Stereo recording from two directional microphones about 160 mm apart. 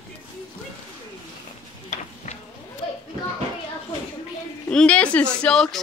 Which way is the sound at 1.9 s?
45° left (ahead or behind).